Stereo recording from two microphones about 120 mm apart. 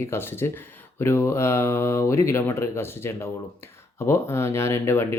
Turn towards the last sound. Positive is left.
turn(degrees=20)  # may be behind; listen again after turning